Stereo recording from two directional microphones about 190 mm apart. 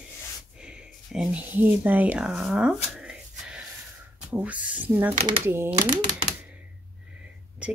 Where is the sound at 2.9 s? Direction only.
5° right (ahead or behind).